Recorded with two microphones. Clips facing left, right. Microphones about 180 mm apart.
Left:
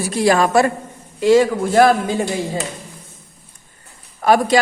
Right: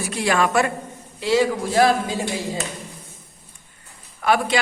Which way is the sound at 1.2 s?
50° left (ahead or behind).